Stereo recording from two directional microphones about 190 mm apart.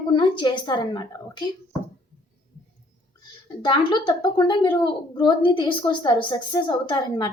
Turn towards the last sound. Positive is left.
turn(degrees=25)  # may be behind; listen again after turning